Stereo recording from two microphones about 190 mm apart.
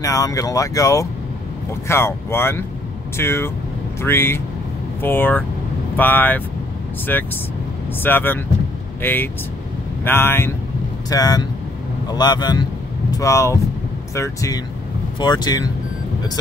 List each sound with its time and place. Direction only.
0.0 s speech: 20° left (ahead or behind)